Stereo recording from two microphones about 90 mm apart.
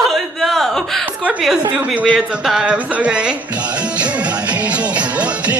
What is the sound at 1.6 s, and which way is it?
Speech, 15° right (ahead or behind).